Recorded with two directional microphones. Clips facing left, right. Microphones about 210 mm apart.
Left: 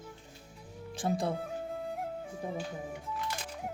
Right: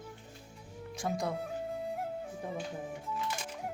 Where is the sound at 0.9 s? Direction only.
30° left (ahead or behind).